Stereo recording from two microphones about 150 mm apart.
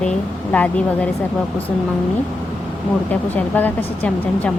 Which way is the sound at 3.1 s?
10° left (ahead or behind).